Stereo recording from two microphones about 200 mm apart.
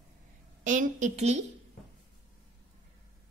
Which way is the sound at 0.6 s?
40° right (ahead or behind).